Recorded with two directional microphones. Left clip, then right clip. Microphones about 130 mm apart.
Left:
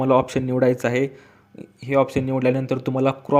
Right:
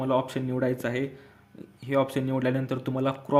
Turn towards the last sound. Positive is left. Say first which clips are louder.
# left 7 dB
turn(degrees=35)  # may be behind; listen again after turning